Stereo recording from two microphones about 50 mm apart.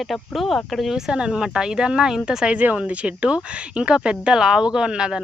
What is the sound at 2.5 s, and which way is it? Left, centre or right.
Speech, right.